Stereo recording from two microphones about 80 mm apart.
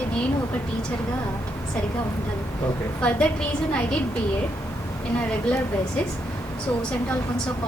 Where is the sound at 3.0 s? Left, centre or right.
Centre.